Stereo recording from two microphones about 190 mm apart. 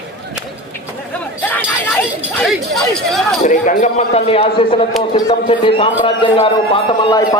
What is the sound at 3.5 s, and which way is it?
A man's voice, 40° left (ahead or behind).